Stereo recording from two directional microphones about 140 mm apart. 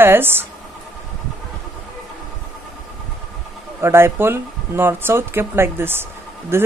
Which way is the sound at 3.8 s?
15° right (ahead or behind).